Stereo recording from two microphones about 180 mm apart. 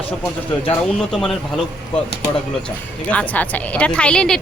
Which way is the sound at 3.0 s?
5° left (ahead or behind).